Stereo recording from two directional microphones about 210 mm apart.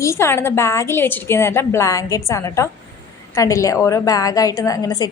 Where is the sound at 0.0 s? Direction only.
10° left (ahead or behind).